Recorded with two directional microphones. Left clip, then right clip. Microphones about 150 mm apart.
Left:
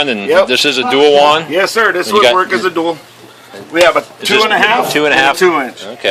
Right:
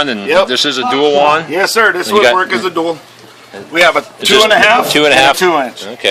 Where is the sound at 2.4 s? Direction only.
35° right (ahead or behind).